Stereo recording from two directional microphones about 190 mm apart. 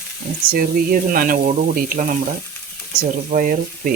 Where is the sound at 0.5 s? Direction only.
45° right (ahead or behind).